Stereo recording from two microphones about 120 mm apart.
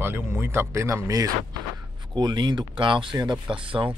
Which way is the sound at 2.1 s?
40° right (ahead or behind).